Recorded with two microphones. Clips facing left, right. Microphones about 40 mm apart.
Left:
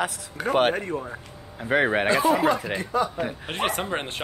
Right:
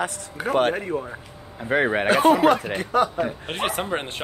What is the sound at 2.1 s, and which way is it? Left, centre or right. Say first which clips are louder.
Speech: right 8 dB; right.